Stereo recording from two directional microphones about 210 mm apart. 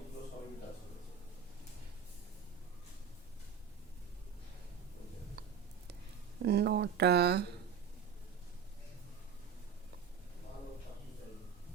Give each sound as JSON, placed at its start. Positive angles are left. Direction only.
{"t": 6.4, "sound": "speech", "side_deg": -50}